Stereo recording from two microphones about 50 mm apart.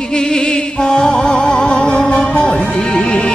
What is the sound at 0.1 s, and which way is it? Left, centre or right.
Music, centre.